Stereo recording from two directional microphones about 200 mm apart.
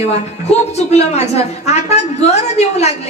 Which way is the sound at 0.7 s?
35° left (ahead or behind).